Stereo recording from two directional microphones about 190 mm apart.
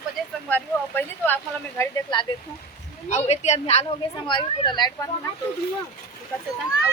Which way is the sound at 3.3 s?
35° left (ahead or behind).